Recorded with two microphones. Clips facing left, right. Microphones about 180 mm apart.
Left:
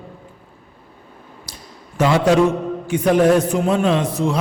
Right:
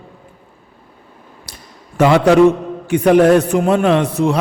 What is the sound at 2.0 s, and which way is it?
A man's voice, 65° right (ahead or behind).